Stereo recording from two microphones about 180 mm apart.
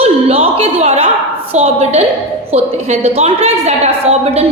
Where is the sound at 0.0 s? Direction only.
35° right (ahead or behind).